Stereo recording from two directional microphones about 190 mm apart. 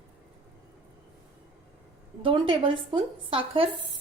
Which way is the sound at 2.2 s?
25° right (ahead or behind).